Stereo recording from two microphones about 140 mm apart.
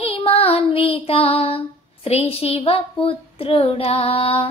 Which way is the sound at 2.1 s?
45° left (ahead or behind).